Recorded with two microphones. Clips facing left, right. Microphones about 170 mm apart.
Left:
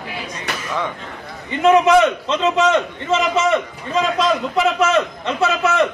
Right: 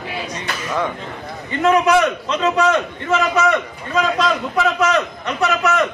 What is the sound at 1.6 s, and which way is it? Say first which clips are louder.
A man's voice: left 2 dB; 20° left (ahead or behind).